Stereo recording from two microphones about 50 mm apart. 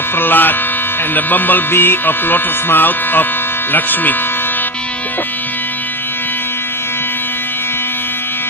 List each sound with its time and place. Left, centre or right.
0.2 s speech: left